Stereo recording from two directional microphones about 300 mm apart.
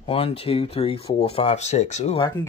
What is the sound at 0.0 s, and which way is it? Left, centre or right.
Speech, centre.